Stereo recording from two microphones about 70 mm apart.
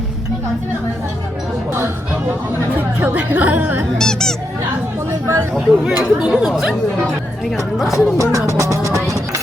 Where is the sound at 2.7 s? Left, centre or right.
Right.